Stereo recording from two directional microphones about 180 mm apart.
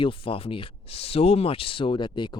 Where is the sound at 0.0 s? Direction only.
30° left (ahead or behind).